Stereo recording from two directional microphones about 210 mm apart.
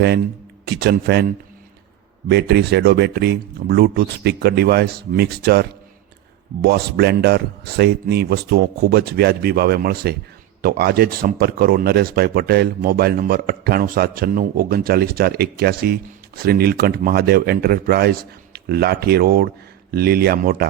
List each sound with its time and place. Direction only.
0.6 s speech: 50° right (ahead or behind)
2.3 s speech: 50° right (ahead or behind)